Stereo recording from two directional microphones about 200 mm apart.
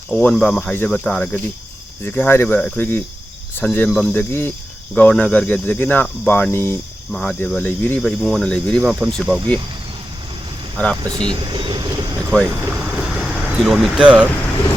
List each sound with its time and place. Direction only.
0.1 s speech: 5° left (ahead or behind)
2.0 s cricket: 10° left (ahead or behind)
7.1 s speech: 5° left (ahead or behind)
11.0 s speech: 20° right (ahead or behind)
12.5 s a sound: 10° right (ahead or behind)